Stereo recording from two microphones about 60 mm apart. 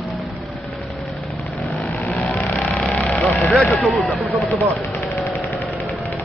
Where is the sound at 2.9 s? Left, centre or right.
Left.